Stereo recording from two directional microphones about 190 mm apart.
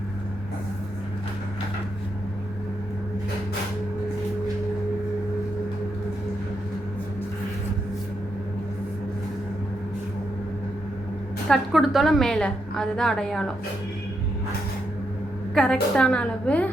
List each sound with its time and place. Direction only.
11.4 s a woman's voice: centre (ahead or behind)
15.5 s a woman's voice: 5° left (ahead or behind)